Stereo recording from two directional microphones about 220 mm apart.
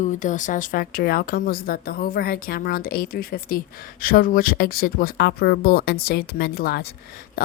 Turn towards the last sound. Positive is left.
turn(degrees=40)  # may be behind; listen again after turning